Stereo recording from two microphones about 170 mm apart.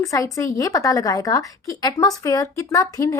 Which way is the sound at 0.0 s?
20° left (ahead or behind).